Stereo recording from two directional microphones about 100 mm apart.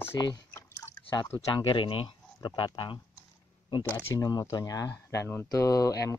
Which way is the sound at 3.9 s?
40° left (ahead or behind).